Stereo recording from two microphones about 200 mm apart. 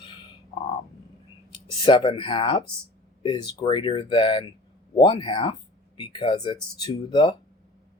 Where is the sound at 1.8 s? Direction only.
25° left (ahead or behind).